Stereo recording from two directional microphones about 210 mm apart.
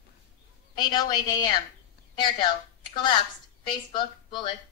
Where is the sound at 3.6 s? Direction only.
20° left (ahead or behind).